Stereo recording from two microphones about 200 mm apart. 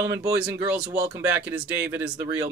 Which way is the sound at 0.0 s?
10° right (ahead or behind).